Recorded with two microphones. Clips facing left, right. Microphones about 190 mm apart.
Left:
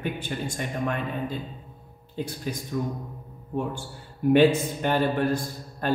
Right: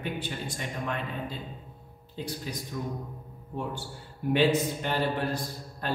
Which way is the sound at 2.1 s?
50° left (ahead or behind).